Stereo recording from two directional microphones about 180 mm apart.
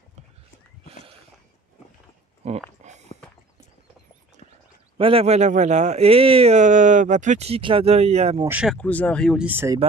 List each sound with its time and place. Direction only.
2.4 s speech: 35° right (ahead or behind)
2.8 s a sound: 40° right (ahead or behind)
4.9 s speech: 30° right (ahead or behind)
8.5 s speech: 5° right (ahead or behind)
8.7 s speech: 10° left (ahead or behind)
9.5 s speech: 10° right (ahead or behind)